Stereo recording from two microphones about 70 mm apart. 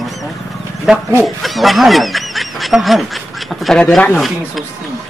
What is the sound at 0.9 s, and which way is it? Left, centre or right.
Speech, centre.